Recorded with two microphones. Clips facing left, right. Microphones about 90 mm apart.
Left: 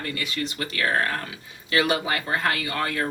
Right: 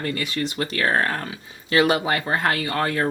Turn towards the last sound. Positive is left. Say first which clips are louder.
# right 4 dB
turn(degrees=-35)  # may be behind; listen again after turning